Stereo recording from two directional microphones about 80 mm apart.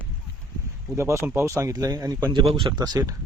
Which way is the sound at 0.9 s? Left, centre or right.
Right.